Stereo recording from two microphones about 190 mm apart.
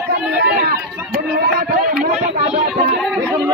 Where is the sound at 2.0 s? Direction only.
40° right (ahead or behind).